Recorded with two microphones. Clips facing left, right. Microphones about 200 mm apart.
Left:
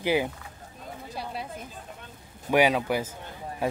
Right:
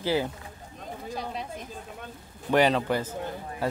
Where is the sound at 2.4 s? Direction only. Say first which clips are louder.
Even; 10° left (ahead or behind).